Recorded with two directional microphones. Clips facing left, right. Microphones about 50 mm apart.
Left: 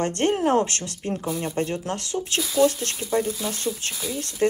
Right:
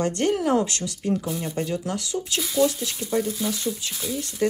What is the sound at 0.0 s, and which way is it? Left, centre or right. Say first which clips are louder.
Speech: left 1 dB; left.